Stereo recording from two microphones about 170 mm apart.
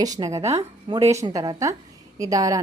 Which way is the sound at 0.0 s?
20° right (ahead or behind).